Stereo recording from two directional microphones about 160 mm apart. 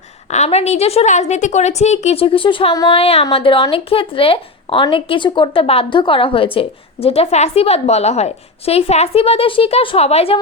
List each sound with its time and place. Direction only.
0.3 s a woman's voice: 45° left (ahead or behind)